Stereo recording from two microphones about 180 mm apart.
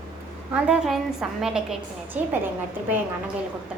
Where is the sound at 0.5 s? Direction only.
5° right (ahead or behind).